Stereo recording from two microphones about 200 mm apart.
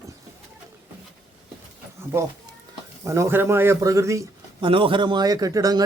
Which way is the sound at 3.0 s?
15° right (ahead or behind).